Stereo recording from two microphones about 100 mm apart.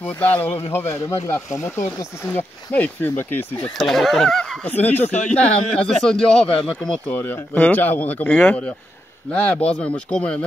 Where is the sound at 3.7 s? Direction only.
Centre (ahead or behind).